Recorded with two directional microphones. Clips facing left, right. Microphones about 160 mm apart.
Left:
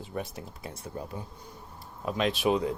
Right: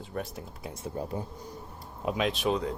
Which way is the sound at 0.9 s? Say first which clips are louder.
Right 4 dB; 30° right (ahead or behind).